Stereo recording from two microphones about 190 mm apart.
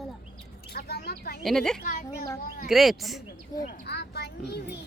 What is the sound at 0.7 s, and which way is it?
Speech, 55° left (ahead or behind).